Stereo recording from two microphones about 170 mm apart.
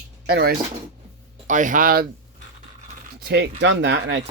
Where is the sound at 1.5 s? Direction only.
50° right (ahead or behind).